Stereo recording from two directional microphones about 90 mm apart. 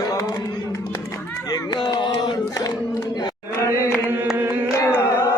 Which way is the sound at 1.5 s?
55° left (ahead or behind).